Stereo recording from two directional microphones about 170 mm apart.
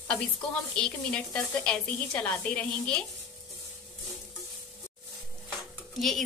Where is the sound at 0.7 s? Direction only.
5° left (ahead or behind).